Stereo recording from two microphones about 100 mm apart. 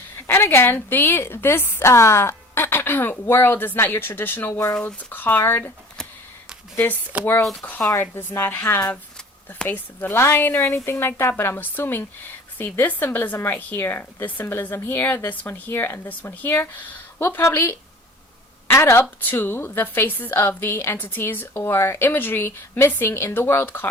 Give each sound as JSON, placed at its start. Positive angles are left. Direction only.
{"t": 0.3, "sound": "a woman's voice", "side_deg": 20}
{"t": 6.7, "sound": "a woman's voice", "side_deg": 20}
{"t": 8.9, "sound": "a sound", "side_deg": 10}
{"t": 9.6, "sound": "a woman's voice", "side_deg": 20}